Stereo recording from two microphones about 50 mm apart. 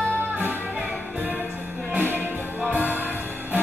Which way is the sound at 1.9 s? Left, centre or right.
Right.